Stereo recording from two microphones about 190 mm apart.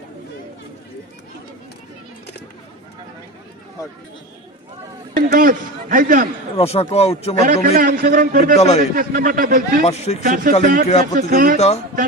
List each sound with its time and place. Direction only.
5.1 s a man's voice: 50° right (ahead or behind)
6.6 s speech: 30° left (ahead or behind)
7.4 s a man's voice: 50° right (ahead or behind)
8.5 s speech: 35° left (ahead or behind)
9.0 s a man's voice: 45° right (ahead or behind)
9.8 s speech: 35° left (ahead or behind)
10.2 s a man's voice: 45° right (ahead or behind)
11.5 s speech: 35° left (ahead or behind)